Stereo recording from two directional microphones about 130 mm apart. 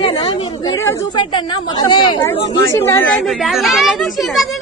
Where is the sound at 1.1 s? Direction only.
35° left (ahead or behind).